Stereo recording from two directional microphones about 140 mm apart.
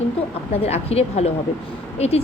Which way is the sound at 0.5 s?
45° left (ahead or behind).